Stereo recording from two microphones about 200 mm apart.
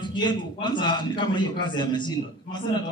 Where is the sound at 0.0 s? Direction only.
20° left (ahead or behind).